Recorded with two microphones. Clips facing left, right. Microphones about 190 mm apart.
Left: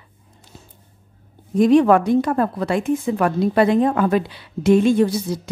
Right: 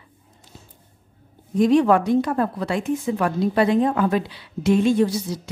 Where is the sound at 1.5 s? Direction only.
55° left (ahead or behind).